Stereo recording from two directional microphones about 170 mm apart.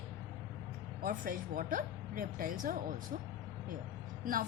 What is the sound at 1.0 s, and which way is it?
A woman's voice, 55° right (ahead or behind).